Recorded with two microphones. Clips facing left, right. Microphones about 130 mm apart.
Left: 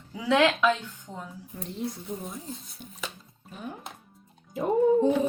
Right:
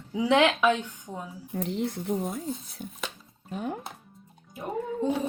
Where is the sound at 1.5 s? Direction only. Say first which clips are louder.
Right 5 dB; 90° right.